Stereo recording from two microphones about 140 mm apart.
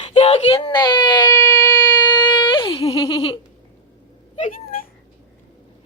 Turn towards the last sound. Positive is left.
turn(degrees=60)  # may be behind; listen again after turning